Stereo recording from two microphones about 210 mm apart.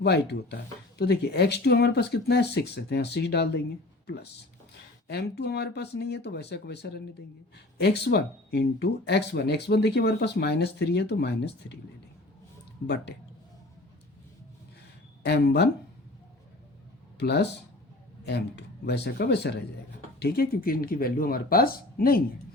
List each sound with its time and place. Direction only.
0.0 s speech: 50° left (ahead or behind)
15.2 s speech: 50° left (ahead or behind)
17.2 s speech: 50° left (ahead or behind)